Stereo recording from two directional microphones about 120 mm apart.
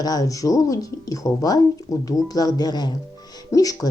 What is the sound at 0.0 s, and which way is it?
A woman's voice, 30° left (ahead or behind).